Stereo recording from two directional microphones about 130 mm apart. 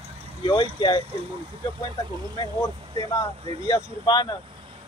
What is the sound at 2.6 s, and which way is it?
Speech, 30° left (ahead or behind).